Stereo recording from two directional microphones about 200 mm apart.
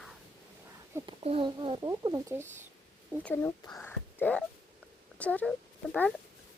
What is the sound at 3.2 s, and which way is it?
Speech, 10° left (ahead or behind).